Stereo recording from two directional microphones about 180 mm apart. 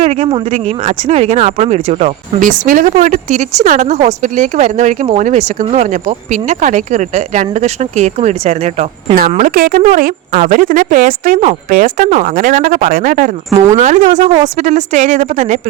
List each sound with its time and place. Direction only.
0.0 s a sound: 40° right (ahead or behind)
0.3 s speech: 25° right (ahead or behind)
9.4 s speech: 50° right (ahead or behind)